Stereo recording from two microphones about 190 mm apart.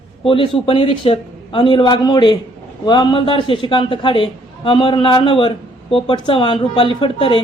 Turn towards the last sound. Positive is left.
turn(degrees=25)  # may be behind; listen again after turning